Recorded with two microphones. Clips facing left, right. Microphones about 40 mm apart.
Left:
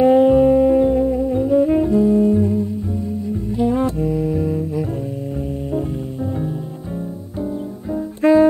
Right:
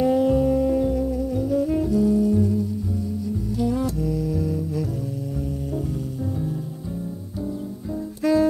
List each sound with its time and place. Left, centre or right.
0.0 s music: left
8.2 s music: left